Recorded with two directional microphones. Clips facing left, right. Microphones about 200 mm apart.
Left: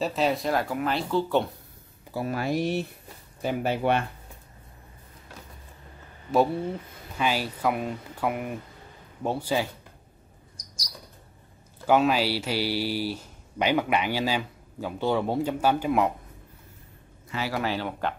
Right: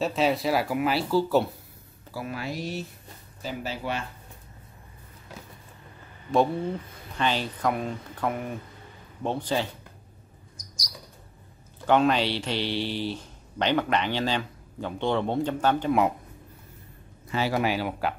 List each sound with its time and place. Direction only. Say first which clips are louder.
0.0 s speech: right 1 dB; centre (ahead or behind)
2.2 s speech: left 7 dB; 50° left (ahead or behind)
7.2 s speech: even; 10° left (ahead or behind)
11.8 s speech: even; 5° left (ahead or behind)
17.3 s speech: right 3 dB; 25° right (ahead or behind); by 18.1 s 10° right (ahead or behind)